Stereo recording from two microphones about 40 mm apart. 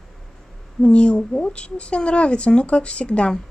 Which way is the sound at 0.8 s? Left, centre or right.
Left.